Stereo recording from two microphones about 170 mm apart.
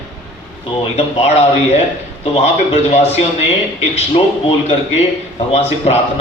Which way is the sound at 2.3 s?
40° left (ahead or behind).